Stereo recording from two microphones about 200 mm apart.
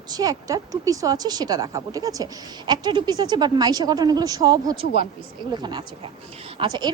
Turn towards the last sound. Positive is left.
turn(degrees=-20)  # may be behind; listen again after turning